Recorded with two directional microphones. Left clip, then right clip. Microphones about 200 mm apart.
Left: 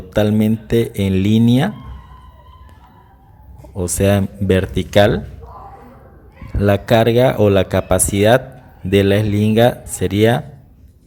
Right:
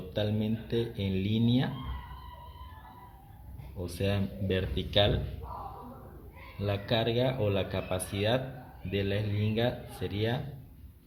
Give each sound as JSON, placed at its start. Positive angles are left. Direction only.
{"t": 0.1, "sound": "speech", "side_deg": 50}
{"t": 3.8, "sound": "speech", "side_deg": 50}
{"t": 6.6, "sound": "speech", "side_deg": 50}